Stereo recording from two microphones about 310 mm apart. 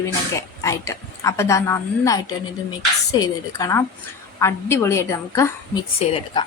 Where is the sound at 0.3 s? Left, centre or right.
Centre.